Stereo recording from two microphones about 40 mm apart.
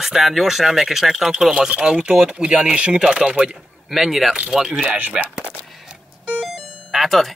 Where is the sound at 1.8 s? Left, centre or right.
Right.